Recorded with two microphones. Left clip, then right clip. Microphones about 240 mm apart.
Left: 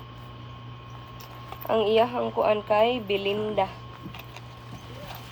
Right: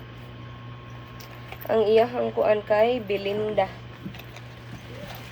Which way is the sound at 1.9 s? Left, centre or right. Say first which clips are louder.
Right 3 dB; centre.